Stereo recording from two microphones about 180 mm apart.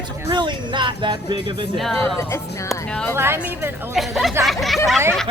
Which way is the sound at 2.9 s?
5° left (ahead or behind).